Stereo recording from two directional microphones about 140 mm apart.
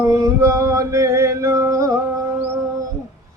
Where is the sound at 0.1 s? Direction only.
25° right (ahead or behind).